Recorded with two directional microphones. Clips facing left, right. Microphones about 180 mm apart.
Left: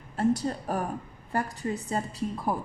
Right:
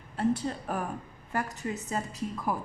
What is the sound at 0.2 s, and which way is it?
Speech, 40° left (ahead or behind).